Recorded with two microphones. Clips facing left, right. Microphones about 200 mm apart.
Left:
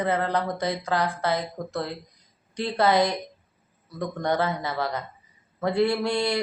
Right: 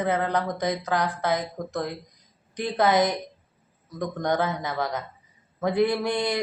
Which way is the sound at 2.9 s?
20° right (ahead or behind).